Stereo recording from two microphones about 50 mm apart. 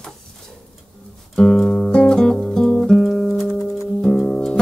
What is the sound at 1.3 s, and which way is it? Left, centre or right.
Music, centre.